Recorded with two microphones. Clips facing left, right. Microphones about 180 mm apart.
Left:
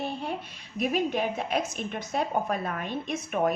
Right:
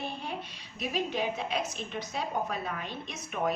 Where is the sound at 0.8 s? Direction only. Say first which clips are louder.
Left 5 dB; 50° left (ahead or behind).